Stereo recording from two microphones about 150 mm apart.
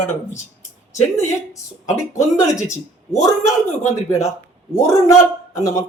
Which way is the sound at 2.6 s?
20° left (ahead or behind).